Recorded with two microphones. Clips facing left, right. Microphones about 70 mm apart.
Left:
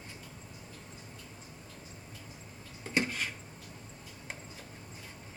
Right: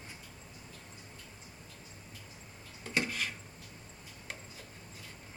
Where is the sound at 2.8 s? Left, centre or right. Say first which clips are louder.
Left 2 dB; centre.